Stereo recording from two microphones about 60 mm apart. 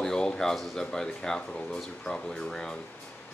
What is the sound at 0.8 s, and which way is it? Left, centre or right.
Speech, centre.